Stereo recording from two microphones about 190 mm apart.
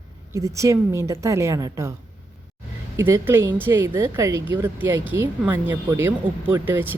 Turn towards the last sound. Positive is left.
turn(degrees=-10)  # may be behind; listen again after turning